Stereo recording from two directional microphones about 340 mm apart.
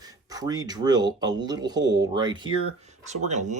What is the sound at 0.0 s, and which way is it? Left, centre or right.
Speech, centre.